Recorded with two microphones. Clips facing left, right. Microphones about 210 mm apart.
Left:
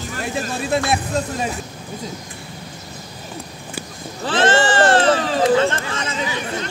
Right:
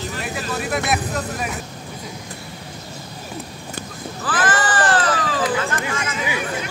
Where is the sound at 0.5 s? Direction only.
25° left (ahead or behind).